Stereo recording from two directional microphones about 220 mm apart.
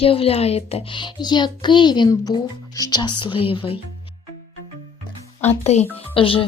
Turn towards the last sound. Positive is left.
turn(degrees=25)  # may be behind; listen again after turning